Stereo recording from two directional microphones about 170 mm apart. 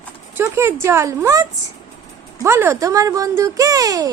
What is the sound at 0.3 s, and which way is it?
A woman's voice, 15° right (ahead or behind).